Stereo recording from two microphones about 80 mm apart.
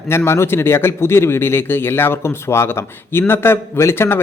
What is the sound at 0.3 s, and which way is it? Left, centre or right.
Speech, left.